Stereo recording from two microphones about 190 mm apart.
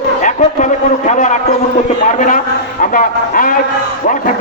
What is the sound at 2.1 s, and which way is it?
A man's voice, 45° left (ahead or behind).